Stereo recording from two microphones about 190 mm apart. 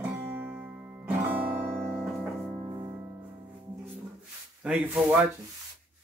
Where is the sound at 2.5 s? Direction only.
15° right (ahead or behind).